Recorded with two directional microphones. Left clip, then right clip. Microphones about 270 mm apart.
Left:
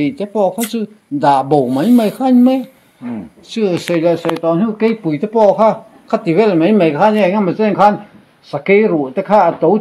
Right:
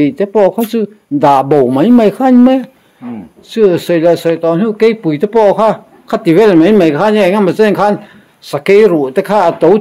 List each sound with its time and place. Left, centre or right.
0.0 s speech: right